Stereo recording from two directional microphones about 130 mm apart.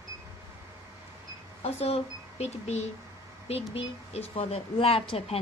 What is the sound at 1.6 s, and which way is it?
A woman's voice, 55° left (ahead or behind).